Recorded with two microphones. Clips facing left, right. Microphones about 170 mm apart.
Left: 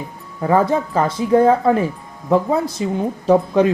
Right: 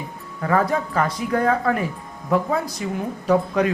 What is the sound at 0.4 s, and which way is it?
Speech, 25° left (ahead or behind).